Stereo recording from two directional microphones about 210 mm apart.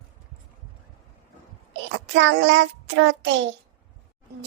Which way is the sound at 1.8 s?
60° right (ahead or behind).